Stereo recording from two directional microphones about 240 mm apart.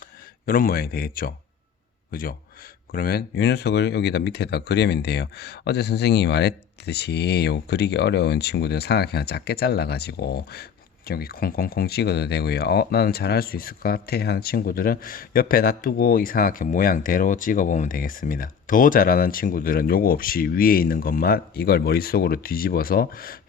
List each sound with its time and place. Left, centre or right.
0.4 s a man's voice: left